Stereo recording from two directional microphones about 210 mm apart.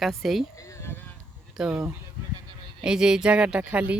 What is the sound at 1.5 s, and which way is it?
A woman's voice, 5° right (ahead or behind).